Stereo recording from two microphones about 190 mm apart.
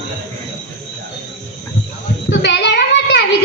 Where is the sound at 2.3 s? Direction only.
65° left (ahead or behind).